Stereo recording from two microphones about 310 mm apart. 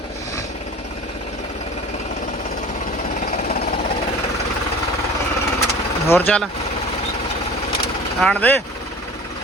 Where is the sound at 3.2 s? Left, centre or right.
Left.